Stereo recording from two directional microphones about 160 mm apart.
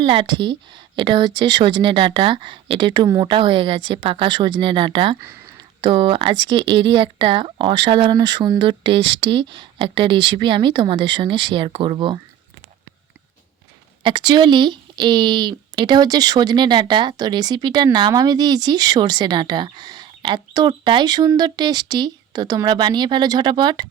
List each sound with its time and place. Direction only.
0.0 s speech: 30° right (ahead or behind)
14.0 s speech: 30° right (ahead or behind)